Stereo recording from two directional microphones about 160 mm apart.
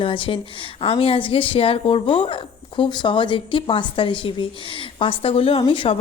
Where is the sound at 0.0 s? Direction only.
30° left (ahead or behind).